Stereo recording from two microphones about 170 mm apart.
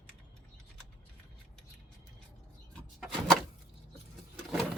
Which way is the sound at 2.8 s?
Centre (ahead or behind).